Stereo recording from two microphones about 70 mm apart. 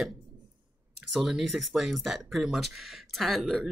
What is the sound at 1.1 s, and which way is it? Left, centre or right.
Speech, centre.